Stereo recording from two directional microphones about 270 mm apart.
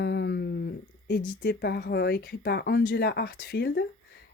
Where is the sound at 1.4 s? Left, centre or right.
Left.